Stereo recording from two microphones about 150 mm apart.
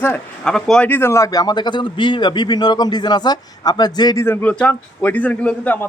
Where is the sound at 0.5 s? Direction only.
5° left (ahead or behind).